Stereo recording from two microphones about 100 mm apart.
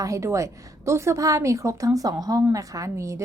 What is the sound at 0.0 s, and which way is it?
Speech, 30° right (ahead or behind).